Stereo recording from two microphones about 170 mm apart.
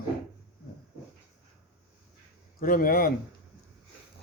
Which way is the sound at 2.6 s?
55° left (ahead or behind).